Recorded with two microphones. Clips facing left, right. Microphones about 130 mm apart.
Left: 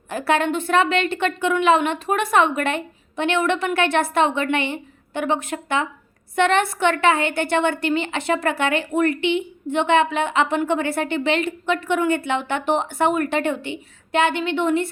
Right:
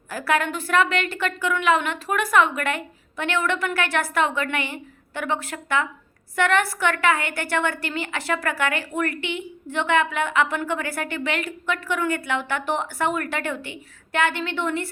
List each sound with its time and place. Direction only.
0.1 s a woman's voice: 25° left (ahead or behind)